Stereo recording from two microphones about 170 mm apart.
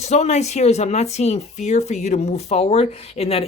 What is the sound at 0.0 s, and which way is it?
Speech, 40° left (ahead or behind).